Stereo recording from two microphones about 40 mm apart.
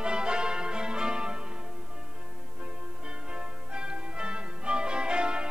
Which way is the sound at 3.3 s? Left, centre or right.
Right.